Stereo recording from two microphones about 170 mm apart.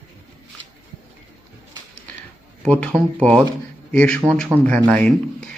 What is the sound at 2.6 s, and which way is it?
Speech, 5° left (ahead or behind).